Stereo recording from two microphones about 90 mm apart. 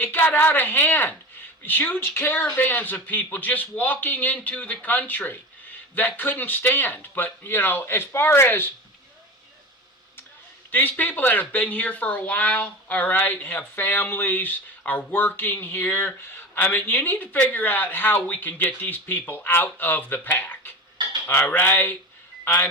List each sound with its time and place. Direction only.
0.0 s speech: 20° left (ahead or behind)
10.7 s speech: 20° left (ahead or behind)